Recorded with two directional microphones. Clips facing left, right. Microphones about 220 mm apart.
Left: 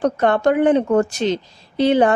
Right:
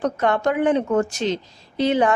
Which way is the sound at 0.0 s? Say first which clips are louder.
Left 4 dB; 35° left (ahead or behind).